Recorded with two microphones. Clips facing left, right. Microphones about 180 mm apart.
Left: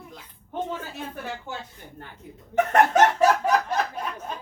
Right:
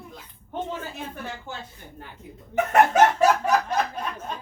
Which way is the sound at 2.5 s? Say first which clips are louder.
Even; 10° right (ahead or behind).